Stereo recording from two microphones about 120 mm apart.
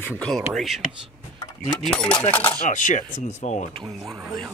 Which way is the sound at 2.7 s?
90° left.